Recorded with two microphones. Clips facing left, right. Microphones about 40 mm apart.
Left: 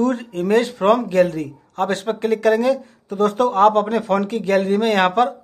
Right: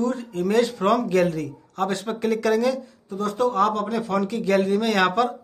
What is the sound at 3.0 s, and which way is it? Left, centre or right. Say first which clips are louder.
A man's voice: left 6 dB; left.